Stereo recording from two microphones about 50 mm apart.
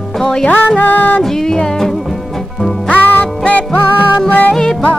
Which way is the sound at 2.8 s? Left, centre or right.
Left.